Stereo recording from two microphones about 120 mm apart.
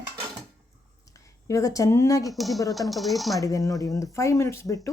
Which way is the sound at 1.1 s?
25° left (ahead or behind).